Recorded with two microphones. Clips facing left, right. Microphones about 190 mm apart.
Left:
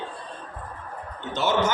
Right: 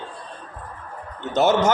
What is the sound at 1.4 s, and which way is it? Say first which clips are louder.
Speech: right 5 dB; 45° right (ahead or behind).